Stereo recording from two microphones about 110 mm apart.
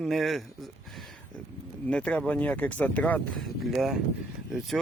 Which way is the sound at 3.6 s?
Centre (ahead or behind).